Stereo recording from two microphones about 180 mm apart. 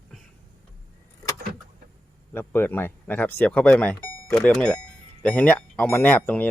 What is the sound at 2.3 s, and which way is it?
Speech, 10° left (ahead or behind).